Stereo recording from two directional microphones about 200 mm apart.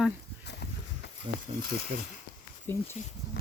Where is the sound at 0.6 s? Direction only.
55° left (ahead or behind).